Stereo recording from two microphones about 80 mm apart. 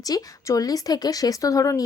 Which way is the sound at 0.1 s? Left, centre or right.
Left.